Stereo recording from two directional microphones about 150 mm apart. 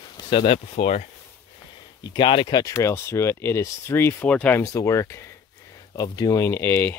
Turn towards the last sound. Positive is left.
turn(degrees=15)  # may be behind; listen again after turning